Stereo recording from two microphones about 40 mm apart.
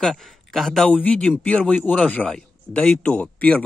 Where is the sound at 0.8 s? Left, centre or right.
Left.